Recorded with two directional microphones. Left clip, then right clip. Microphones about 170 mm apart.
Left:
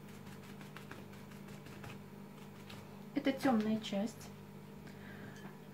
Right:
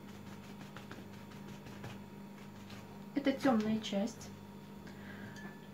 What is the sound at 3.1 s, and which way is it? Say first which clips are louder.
Speech: right 2 dB; 5° left (ahead or behind).